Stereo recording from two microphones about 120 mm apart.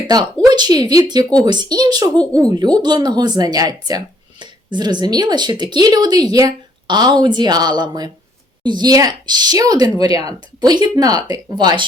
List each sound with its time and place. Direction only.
0.5 s speech: 35° right (ahead or behind)